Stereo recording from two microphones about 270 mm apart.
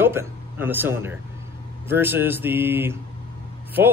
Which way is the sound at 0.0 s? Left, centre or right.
Centre.